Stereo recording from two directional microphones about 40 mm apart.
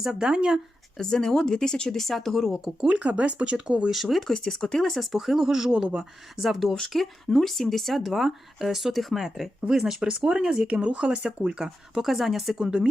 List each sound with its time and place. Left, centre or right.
0.0 s speech: centre
0.9 s speech: centre
2.8 s speech: right
3.8 s speech: centre
4.2 s speech: centre
4.9 s speech: centre
6.3 s speech: centre
9.7 s speech: centre
12.5 s speech: right